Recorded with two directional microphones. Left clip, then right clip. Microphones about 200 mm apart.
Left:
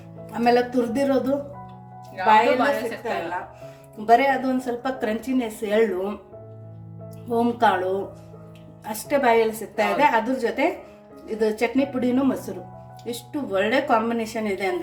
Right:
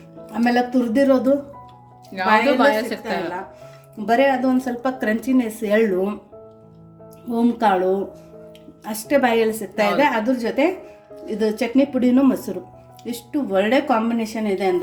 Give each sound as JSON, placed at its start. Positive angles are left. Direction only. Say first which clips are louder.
{"t": 0.3, "sound": "a woman's voice", "louder": "even", "side_deg": -25}
{"t": 7.3, "sound": "speech", "louder": "right 1 dB", "side_deg": -30}
{"t": 8.8, "sound": "a woman's voice", "louder": "right 3 dB", "side_deg": -30}